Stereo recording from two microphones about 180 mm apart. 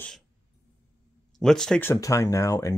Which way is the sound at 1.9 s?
15° left (ahead or behind).